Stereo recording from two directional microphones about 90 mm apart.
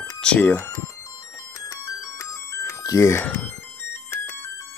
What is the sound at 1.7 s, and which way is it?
Music, 30° left (ahead or behind).